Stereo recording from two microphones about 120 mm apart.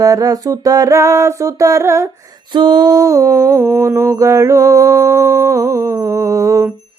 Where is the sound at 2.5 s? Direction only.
40° right (ahead or behind).